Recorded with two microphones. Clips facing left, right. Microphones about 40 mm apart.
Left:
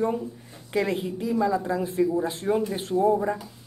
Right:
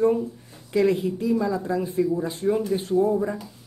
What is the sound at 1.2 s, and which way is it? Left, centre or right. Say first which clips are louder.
Speech: left 2 dB; centre.